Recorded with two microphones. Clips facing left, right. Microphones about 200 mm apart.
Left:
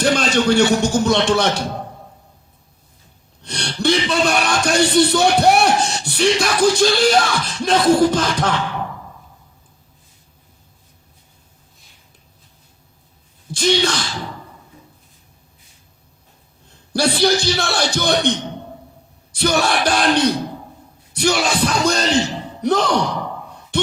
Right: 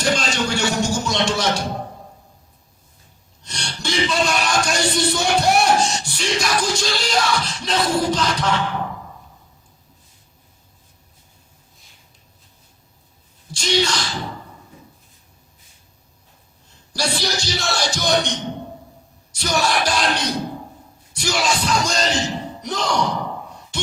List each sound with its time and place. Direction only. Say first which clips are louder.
0.0 s a man's voice: left 5 dB; 60° left (ahead or behind)
3.4 s speech: left 10 dB; 60° left (ahead or behind)
13.5 s speech: left 3 dB; 55° left (ahead or behind)
16.9 s speech: left 8 dB; 55° left (ahead or behind)
23.7 s a sound: left 9 dB; 60° left (ahead or behind)